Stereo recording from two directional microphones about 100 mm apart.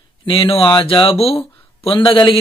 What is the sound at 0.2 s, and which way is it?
Speech, 65° left (ahead or behind).